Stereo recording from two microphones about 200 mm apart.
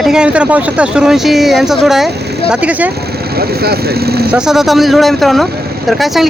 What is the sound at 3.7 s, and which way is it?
Speech, 50° right (ahead or behind).